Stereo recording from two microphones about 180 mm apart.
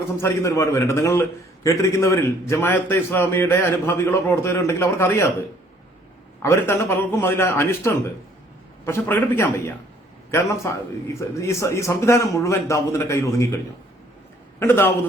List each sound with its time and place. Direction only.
0.2 s a man's voice: 15° left (ahead or behind)
6.4 s a man's voice: 15° left (ahead or behind)
14.6 s a man's voice: 10° left (ahead or behind)